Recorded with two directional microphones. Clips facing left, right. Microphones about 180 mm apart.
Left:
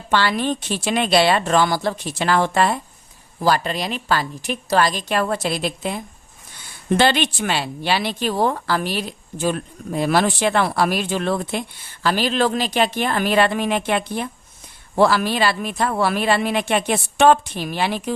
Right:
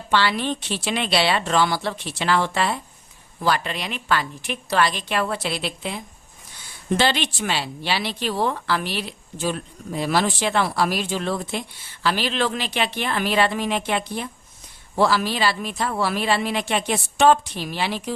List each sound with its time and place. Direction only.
0.1 s a woman's voice: 45° left (ahead or behind)
6.9 s speech: 55° left (ahead or behind)
12.0 s speech: 45° left (ahead or behind)